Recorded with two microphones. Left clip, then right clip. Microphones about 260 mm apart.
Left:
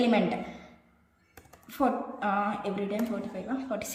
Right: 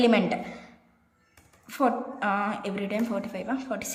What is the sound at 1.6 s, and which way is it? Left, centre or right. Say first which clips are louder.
A woman's voice: right 3 dB; centre.